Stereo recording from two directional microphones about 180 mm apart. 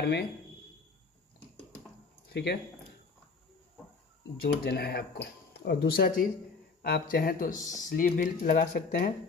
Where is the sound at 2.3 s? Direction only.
65° left (ahead or behind).